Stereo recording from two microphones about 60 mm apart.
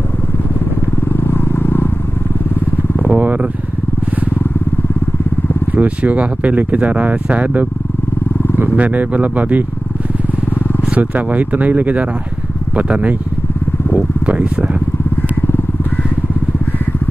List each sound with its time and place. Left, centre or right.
1.0 s vehicle: left
3.0 s vehicle: right
5.8 s speech: right
8.7 s speech: right
10.9 s speech: right